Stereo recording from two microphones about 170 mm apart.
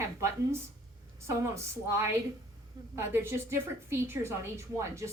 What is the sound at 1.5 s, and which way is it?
A woman's voice, 15° right (ahead or behind).